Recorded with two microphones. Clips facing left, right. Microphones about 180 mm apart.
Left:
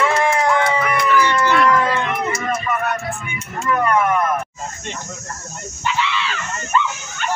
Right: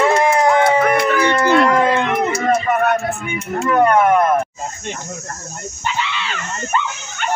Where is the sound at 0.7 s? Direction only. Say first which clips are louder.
Right 4 dB; 45° right (ahead or behind).